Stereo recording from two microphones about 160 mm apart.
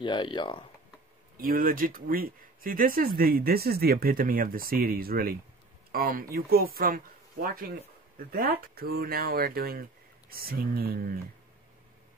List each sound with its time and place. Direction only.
0.0 s speech: 30° left (ahead or behind)
1.4 s speech: 65° right (ahead or behind)